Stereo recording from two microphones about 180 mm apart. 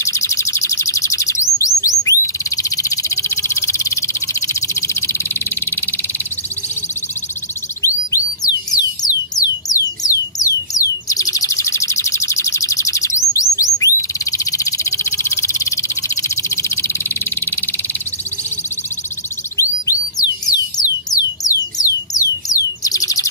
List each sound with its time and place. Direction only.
0.0 s bird: 15° left (ahead or behind)
7.8 s music: 20° left (ahead or behind)
19.5 s music: 15° left (ahead or behind)